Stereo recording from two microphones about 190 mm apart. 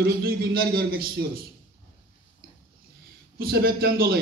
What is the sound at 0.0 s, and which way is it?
A man's voice, 50° right (ahead or behind).